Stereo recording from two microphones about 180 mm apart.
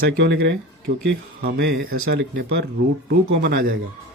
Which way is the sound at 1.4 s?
65° right (ahead or behind).